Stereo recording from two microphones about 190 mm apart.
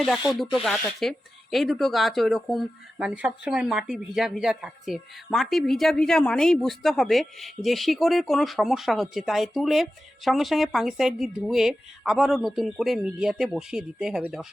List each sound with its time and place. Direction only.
0.5 s speech: centre (ahead or behind)